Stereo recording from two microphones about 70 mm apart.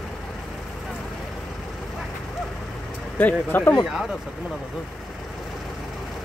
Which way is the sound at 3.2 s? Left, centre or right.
Left.